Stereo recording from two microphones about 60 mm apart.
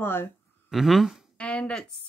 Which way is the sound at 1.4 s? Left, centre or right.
Centre.